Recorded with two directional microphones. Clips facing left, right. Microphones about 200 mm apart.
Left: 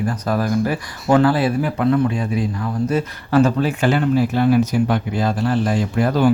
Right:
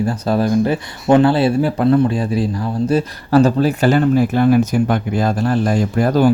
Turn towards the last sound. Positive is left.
turn(degrees=-40)  # may be behind; listen again after turning